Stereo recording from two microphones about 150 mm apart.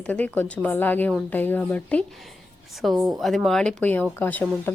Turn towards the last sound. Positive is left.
turn(degrees=10)  # may be behind; listen again after turning